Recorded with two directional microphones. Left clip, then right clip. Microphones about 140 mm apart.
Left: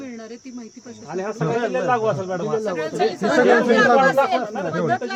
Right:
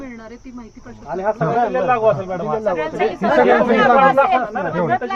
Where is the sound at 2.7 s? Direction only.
25° left (ahead or behind).